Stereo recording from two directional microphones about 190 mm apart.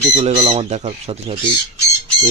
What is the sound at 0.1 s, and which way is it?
Speech, 35° right (ahead or behind).